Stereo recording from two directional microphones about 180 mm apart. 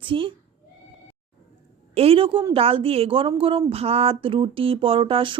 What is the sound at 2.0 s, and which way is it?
Speech, 30° right (ahead or behind).